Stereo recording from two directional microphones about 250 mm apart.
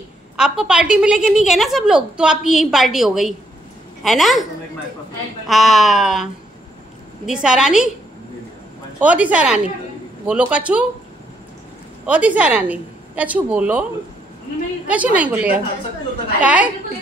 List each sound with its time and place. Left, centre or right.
0.4 s a woman's voice: centre
5.5 s a woman's voice: centre
7.2 s a woman's voice: centre
9.0 s a woman's voice: centre
12.1 s a woman's voice: centre
14.9 s a woman's voice: centre